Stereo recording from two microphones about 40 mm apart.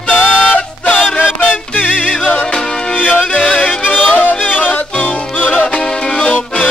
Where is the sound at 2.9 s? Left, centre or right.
Left.